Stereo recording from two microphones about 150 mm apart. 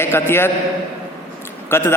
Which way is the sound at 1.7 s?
15° left (ahead or behind).